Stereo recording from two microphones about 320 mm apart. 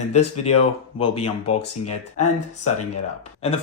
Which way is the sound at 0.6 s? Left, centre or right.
Centre.